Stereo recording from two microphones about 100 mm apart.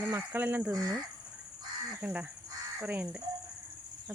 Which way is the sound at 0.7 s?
40° right (ahead or behind).